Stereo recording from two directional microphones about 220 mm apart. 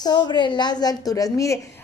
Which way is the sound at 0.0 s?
20° left (ahead or behind).